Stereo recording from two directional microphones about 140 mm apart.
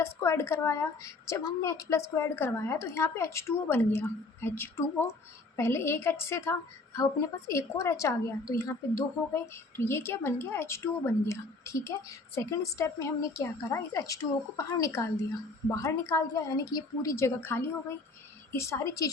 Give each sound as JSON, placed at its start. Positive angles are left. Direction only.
{"t": 0.0, "sound": "a woman's voice", "side_deg": 20}